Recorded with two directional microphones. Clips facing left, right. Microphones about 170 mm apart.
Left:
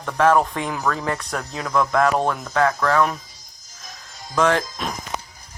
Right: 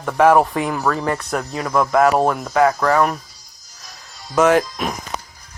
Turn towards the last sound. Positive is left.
turn(degrees=-10)  # may be behind; listen again after turning